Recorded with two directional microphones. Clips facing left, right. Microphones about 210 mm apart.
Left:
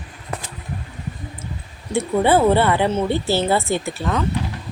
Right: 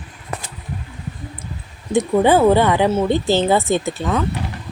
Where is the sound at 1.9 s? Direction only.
15° right (ahead or behind).